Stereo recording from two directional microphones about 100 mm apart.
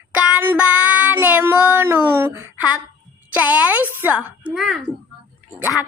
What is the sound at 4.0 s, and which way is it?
Speech, 15° right (ahead or behind).